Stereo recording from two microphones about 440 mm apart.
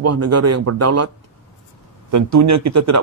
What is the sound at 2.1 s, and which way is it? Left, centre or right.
Speech, right.